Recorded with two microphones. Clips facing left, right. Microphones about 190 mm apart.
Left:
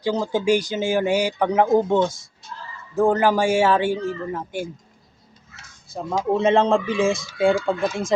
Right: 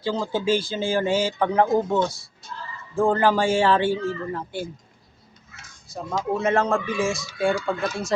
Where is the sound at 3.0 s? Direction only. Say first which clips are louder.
Left 2 dB; 10° left (ahead or behind).